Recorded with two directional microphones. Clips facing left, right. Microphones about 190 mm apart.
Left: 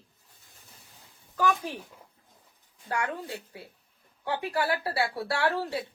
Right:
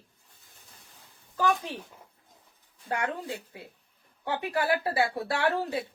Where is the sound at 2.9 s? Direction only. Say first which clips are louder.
Right 1 dB; 20° right (ahead or behind).